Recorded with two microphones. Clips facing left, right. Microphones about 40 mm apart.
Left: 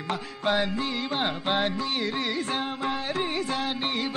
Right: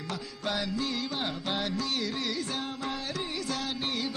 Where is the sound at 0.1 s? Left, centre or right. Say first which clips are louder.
Left 7 dB; left.